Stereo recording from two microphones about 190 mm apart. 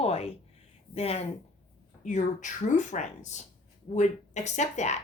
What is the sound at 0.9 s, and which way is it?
Speech, 30° left (ahead or behind).